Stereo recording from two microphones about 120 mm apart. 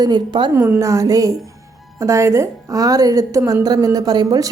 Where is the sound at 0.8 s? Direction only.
25° right (ahead or behind).